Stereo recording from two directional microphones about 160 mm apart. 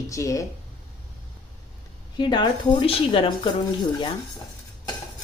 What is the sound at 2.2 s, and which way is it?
A woman's voice, 30° left (ahead or behind).